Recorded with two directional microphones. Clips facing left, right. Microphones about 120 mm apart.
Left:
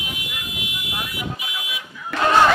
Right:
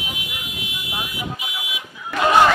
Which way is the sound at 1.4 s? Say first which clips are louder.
Even; 15° right (ahead or behind).